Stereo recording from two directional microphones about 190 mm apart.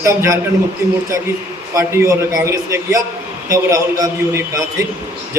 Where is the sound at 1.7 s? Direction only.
15° right (ahead or behind).